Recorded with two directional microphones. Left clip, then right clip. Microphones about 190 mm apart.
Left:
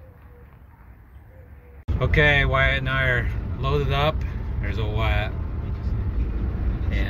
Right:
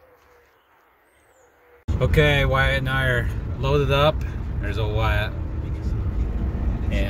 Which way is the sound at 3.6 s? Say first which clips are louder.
Right 4 dB; 40° right (ahead or behind).